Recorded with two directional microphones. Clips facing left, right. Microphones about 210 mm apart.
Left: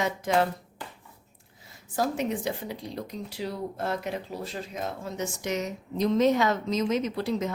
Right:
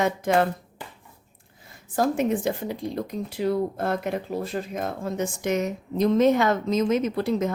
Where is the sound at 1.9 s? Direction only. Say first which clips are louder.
Right 5 dB; 50° right (ahead or behind).